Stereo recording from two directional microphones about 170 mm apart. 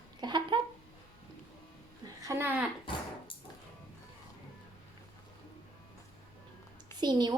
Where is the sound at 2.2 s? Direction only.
15° right (ahead or behind).